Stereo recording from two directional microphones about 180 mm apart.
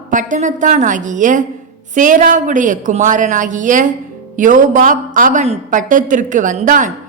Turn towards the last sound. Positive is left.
turn(degrees=-45)  # may be behind; listen again after turning